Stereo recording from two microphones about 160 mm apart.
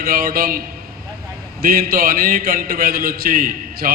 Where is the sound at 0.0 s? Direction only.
65° right (ahead or behind).